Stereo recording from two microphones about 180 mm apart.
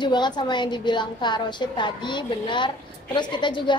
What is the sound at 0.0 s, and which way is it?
A woman's voice, 25° left (ahead or behind).